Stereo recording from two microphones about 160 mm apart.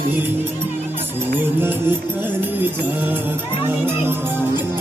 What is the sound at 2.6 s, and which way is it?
Music, 10° right (ahead or behind).